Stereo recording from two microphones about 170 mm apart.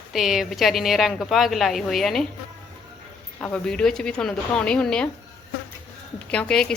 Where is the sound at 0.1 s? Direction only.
Centre (ahead or behind).